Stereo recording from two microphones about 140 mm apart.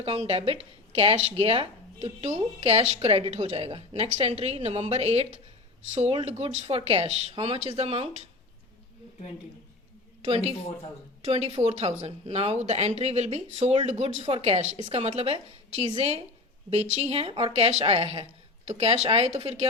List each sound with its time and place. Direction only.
0.0 s speech: 45° right (ahead or behind)
11.2 s speech: 45° right (ahead or behind)